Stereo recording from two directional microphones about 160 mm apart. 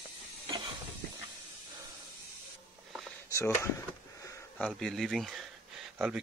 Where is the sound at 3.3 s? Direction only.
15° left (ahead or behind).